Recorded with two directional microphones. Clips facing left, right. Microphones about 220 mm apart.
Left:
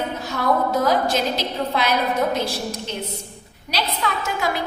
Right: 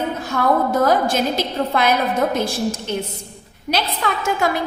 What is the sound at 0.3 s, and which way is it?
A woman's voice, 50° right (ahead or behind).